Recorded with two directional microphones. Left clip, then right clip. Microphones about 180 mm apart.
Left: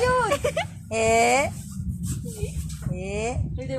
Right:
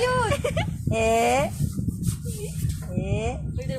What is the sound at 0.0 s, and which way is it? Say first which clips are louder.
Baby cry: left 2 dB; 30° left (ahead or behind).